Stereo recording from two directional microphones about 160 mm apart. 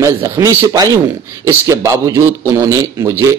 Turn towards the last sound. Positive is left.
turn(degrees=-20)  # may be behind; listen again after turning